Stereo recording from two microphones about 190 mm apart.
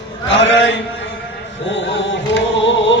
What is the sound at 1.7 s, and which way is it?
Music, 65° left (ahead or behind).